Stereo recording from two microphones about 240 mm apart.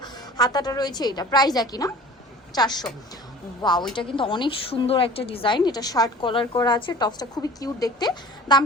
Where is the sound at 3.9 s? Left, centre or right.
Left.